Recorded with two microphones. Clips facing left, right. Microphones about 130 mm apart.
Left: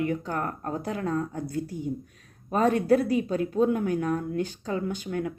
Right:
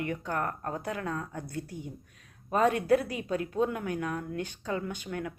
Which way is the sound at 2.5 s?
40° left (ahead or behind).